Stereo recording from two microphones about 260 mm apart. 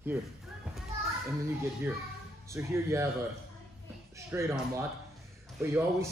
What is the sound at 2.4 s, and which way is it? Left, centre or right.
Speech, centre.